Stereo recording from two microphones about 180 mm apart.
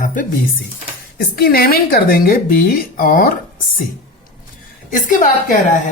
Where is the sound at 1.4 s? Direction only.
55° left (ahead or behind).